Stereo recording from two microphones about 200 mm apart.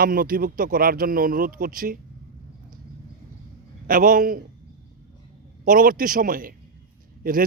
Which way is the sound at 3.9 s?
45° right (ahead or behind).